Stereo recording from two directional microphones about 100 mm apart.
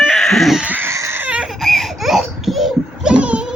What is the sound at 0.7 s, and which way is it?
Baby cry, 20° right (ahead or behind).